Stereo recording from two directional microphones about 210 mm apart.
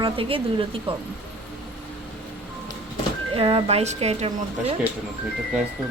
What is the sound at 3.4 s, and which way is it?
Speech, 25° right (ahead or behind).